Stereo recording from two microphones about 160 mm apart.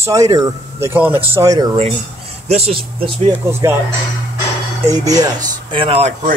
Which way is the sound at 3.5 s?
15° right (ahead or behind).